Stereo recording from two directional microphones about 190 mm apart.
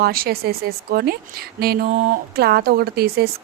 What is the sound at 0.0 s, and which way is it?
A woman's voice, 50° right (ahead or behind).